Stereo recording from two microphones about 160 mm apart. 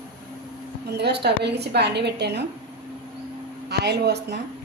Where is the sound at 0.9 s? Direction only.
90° right.